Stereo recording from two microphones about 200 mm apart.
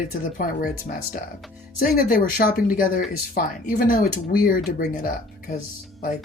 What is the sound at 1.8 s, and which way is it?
Speech, 45° left (ahead or behind).